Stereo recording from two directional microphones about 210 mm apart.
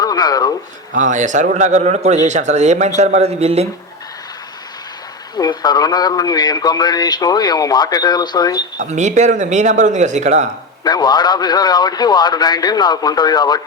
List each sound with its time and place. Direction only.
0.0 s a sound: 20° left (ahead or behind)
0.9 s speech: 35° right (ahead or behind)
5.4 s a man's voice: 20° left (ahead or behind)
8.8 s speech: 35° right (ahead or behind)
10.8 s a man's voice: 20° left (ahead or behind)